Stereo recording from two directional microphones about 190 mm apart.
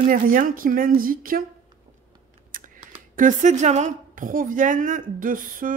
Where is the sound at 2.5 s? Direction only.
45° right (ahead or behind).